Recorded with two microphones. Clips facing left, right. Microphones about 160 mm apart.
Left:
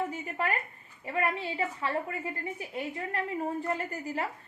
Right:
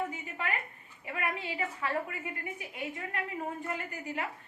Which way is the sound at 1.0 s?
35° left (ahead or behind).